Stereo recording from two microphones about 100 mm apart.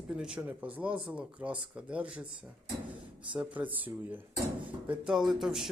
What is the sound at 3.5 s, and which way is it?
Speech, 15° right (ahead or behind).